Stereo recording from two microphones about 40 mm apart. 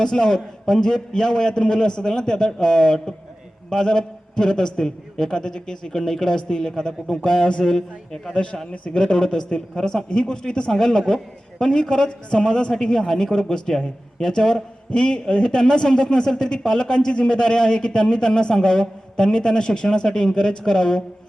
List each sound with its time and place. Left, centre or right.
0.0 s speech: centre
8.7 s a man's voice: left
9.0 s a man's voice: centre